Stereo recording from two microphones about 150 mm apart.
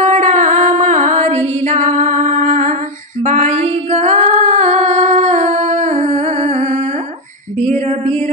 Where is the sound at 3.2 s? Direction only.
50° right (ahead or behind).